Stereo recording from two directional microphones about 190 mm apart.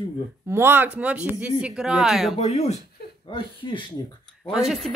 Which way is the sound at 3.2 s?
25° left (ahead or behind).